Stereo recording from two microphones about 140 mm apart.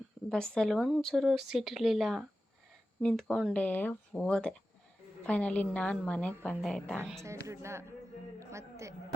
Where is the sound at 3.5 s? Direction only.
10° left (ahead or behind).